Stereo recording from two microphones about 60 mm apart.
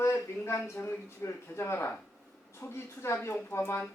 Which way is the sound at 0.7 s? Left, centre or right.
Left.